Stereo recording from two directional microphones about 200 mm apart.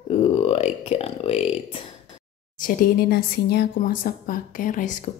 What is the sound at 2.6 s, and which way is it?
A woman's voice, 45° left (ahead or behind).